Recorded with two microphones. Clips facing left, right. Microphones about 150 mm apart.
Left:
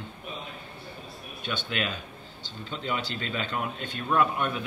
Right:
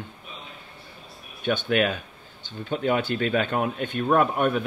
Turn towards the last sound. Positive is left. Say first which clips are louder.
# right 5 dB
turn(degrees=-50)  # may be behind; listen again after turning